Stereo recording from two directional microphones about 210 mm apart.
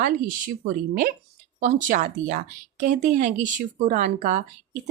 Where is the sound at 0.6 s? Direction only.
40° right (ahead or behind).